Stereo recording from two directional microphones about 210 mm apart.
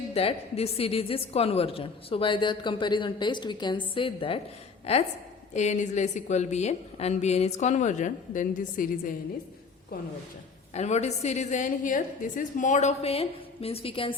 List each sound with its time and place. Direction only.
0.1 s a woman's voice: 30° left (ahead or behind)
5.5 s a woman's voice: 35° left (ahead or behind)
10.8 s a woman's voice: 35° left (ahead or behind)